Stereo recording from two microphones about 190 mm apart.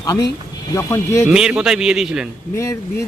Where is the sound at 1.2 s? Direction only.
5° right (ahead or behind).